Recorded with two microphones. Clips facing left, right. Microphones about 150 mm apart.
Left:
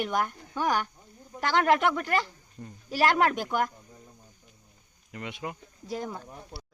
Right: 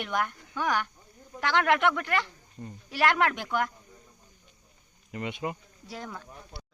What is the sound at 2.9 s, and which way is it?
Speech, 40° left (ahead or behind).